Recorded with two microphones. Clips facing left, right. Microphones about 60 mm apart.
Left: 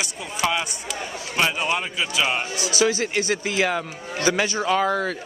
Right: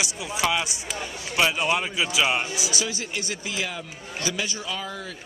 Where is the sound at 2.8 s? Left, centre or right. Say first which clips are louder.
Left 9 dB; left.